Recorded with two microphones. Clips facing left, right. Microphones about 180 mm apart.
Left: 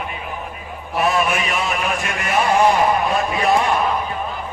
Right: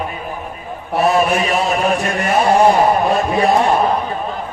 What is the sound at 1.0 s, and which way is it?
Mantra, 35° right (ahead or behind).